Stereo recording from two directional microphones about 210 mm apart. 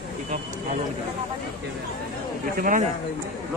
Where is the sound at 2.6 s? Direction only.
40° right (ahead or behind).